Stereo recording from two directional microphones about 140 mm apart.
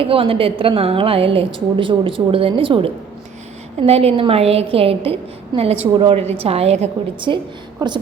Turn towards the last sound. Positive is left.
turn(degrees=-30)  # may be behind; listen again after turning